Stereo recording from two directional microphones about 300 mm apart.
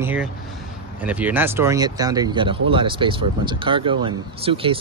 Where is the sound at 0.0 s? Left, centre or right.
Centre.